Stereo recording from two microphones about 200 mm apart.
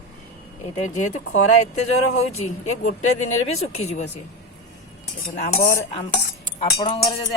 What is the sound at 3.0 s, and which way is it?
Speech, 90° left.